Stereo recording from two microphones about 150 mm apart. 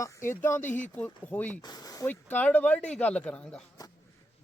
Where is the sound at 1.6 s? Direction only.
25° left (ahead or behind).